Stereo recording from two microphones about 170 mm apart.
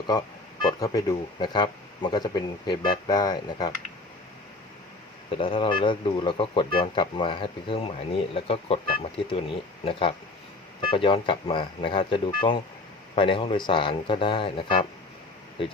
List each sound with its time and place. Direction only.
0.6 s speech: 20° left (ahead or behind)
5.3 s speech: 30° left (ahead or behind)